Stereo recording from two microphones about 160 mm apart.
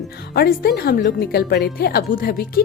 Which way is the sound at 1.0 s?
65° left (ahead or behind).